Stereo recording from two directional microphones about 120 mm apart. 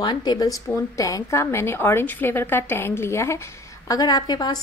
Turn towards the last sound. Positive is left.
turn(degrees=35)  # may be behind; listen again after turning